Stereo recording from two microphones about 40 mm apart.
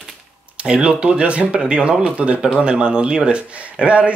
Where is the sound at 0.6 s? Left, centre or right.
Right.